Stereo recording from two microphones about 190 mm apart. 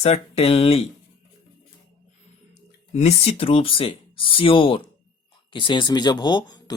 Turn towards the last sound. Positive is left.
turn(degrees=20)  # may be behind; listen again after turning